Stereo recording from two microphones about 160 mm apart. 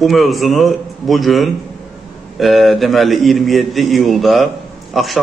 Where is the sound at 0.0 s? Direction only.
Centre (ahead or behind).